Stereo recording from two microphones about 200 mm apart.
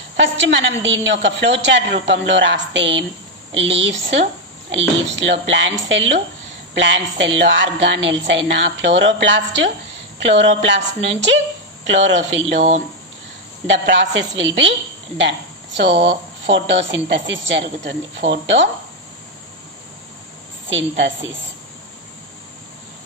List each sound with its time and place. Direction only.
0.2 s a woman's voice: 65° right (ahead or behind)
12.5 s speech: 35° right (ahead or behind)
13.7 s a woman's voice: 65° right (ahead or behind)
20.7 s a woman's voice: 65° right (ahead or behind)